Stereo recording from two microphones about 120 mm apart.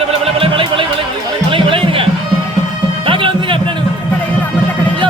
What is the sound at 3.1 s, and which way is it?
Music, 45° right (ahead or behind).